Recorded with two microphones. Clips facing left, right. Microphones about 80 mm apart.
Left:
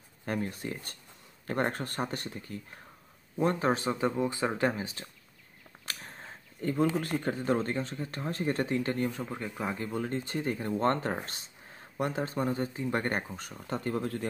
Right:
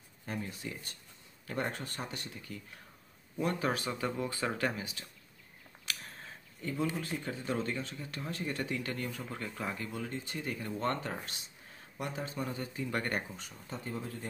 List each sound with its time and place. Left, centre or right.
0.2 s speech: left
5.9 s a sound: left
6.6 s speech: left
7.4 s speech: left; by 9.8 s centre
9.8 s speech: left
13.4 s speech: left